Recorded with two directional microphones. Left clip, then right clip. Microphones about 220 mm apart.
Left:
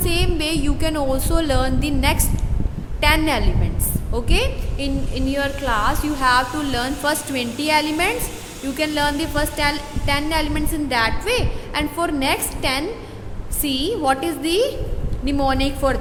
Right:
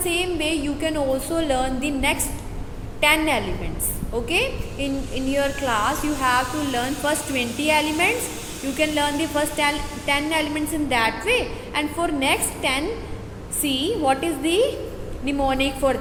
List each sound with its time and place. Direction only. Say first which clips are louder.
0.0 s music: left 1 dB; 20° left (ahead or behind)
3.0 s a woman's voice: left 1 dB; 20° left (ahead or behind)